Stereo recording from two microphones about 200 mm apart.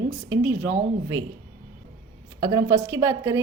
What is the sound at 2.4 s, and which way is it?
A woman's voice, 20° right (ahead or behind).